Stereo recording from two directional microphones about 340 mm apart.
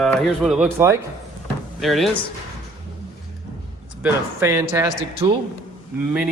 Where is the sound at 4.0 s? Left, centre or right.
Centre.